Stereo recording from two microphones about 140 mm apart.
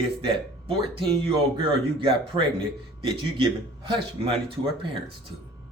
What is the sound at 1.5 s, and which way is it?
Speech, 40° right (ahead or behind).